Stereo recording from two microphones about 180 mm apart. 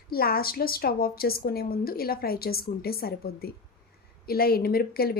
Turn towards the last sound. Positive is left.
turn(degrees=60)  # may be behind; listen again after turning